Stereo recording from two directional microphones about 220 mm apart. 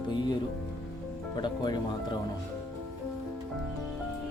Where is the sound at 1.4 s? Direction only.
20° left (ahead or behind).